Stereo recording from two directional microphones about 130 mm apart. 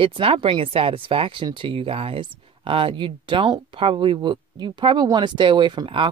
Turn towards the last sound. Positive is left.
turn(degrees=-40)  # may be behind; listen again after turning